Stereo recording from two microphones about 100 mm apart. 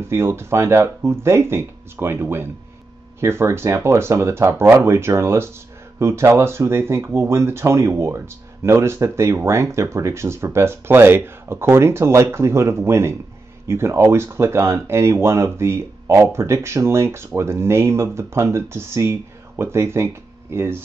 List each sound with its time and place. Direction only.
0.1 s speech: 25° right (ahead or behind)